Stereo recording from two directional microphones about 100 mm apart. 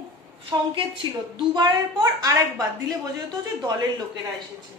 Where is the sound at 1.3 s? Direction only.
45° right (ahead or behind).